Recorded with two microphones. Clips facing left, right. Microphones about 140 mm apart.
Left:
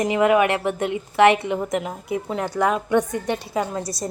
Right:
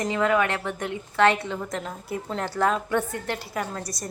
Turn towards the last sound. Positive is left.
turn(degrees=25)  # may be behind; listen again after turning